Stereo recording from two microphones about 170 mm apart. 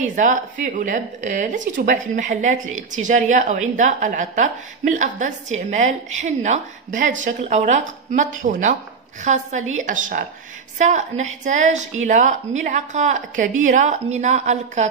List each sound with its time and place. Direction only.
0.0 s a woman's voice: 50° right (ahead or behind)